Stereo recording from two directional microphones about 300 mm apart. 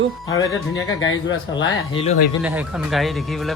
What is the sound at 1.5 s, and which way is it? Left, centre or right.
Speech, centre.